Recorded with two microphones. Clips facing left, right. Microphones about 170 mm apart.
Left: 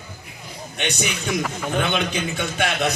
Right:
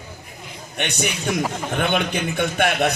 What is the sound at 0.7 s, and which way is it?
A man's voice, 55° right (ahead or behind).